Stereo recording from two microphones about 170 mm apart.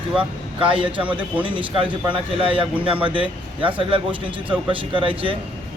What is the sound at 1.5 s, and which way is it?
Speech, 30° right (ahead or behind).